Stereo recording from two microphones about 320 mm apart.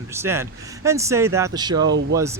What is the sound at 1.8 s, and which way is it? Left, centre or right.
Speech, right.